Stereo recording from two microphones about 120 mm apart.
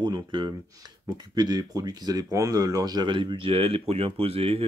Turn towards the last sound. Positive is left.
turn(degrees=-55)  # may be behind; listen again after turning